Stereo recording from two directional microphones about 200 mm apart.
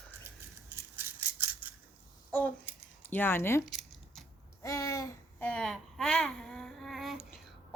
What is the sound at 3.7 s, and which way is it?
Scissors, centre (ahead or behind).